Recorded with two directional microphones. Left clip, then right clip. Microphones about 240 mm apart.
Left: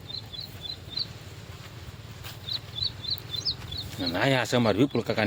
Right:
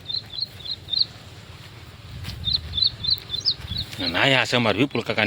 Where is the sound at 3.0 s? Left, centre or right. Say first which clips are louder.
Right 8 dB; centre.